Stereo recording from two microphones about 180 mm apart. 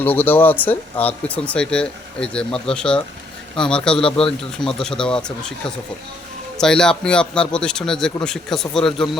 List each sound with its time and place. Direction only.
0.0 s a man's voice: 10° left (ahead or behind)